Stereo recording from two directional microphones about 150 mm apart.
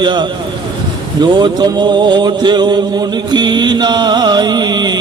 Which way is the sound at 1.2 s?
30° right (ahead or behind).